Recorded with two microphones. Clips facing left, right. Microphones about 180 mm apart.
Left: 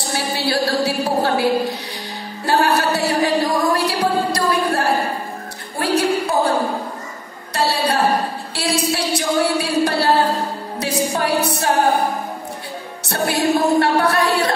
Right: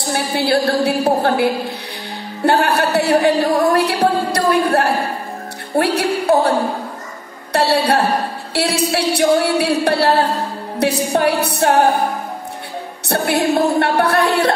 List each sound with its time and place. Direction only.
0.1 s a woman's voice: 55° right (ahead or behind)
7.5 s a woman's voice: 65° right (ahead or behind)
13.1 s a woman's voice: 60° right (ahead or behind)